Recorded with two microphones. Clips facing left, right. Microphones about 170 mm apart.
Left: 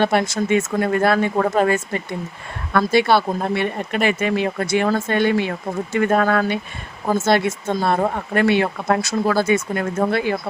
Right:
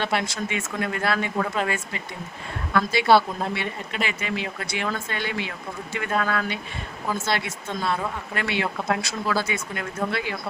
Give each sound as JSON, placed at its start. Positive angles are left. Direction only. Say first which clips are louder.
{"t": 0.0, "sound": "speech", "louder": "left 8 dB", "side_deg": 50}